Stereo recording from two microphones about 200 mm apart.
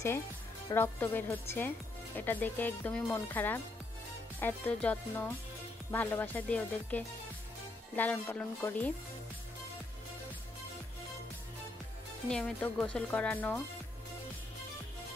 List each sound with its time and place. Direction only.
0.7 s speech: 10° left (ahead or behind)
12.3 s speech: 5° left (ahead or behind)